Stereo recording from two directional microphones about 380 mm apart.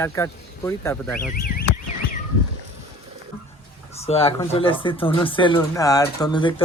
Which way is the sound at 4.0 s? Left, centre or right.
Centre.